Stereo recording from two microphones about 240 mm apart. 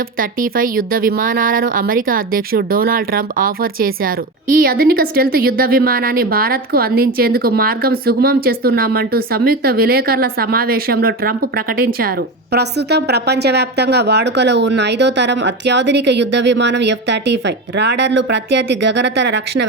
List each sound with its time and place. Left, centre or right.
0.2 s speech: right